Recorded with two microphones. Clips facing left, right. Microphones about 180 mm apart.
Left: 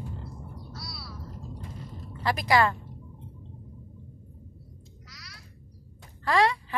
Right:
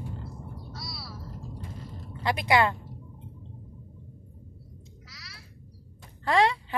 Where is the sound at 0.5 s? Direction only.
Centre (ahead or behind).